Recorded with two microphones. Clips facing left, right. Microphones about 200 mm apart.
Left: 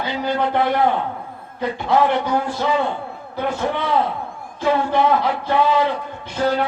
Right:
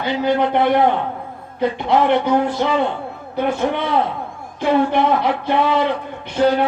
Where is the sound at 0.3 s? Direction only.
20° right (ahead or behind).